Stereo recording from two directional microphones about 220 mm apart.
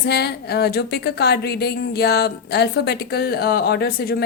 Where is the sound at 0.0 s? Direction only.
50° left (ahead or behind).